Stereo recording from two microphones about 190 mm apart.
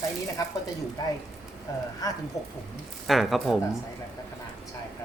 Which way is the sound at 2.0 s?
20° left (ahead or behind).